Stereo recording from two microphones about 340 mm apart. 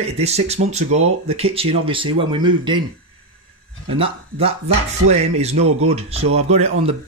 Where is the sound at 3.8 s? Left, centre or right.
Centre.